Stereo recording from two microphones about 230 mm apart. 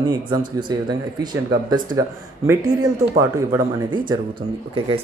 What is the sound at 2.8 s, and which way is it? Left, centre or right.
Speech, centre.